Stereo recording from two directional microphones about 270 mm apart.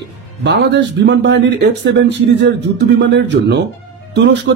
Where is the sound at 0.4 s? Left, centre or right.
Right.